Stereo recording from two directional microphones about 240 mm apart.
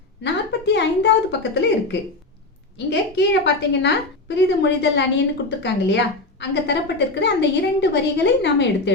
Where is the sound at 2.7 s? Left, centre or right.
Left.